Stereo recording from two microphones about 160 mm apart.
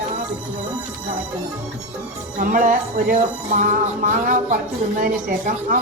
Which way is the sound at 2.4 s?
55° right (ahead or behind).